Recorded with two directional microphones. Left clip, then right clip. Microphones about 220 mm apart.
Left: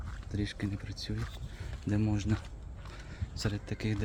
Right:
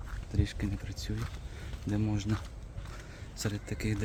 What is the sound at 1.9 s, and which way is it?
Speech, 20° left (ahead or behind).